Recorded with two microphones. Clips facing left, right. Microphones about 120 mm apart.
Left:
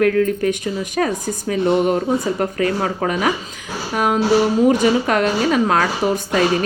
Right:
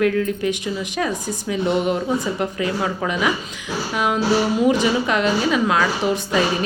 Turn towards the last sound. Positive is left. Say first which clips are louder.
# left 2 dB
turn(degrees=45)  # may be behind; listen again after turning